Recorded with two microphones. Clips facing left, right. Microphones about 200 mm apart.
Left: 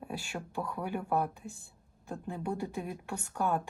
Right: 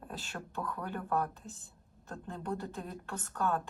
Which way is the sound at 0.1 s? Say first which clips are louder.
Left 3 dB; 10° left (ahead or behind).